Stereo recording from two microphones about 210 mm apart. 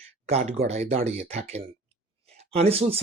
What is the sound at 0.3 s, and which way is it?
Speech, 30° right (ahead or behind).